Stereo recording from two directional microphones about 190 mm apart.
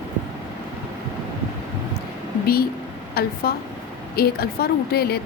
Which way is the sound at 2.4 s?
50° left (ahead or behind).